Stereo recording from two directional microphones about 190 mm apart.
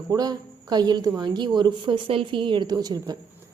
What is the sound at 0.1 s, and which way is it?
A woman's voice, 20° right (ahead or behind).